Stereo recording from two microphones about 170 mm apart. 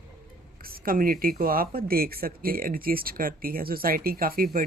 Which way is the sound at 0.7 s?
55° right (ahead or behind).